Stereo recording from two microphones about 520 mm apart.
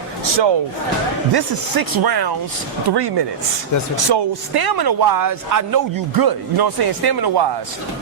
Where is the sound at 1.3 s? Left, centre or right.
Right.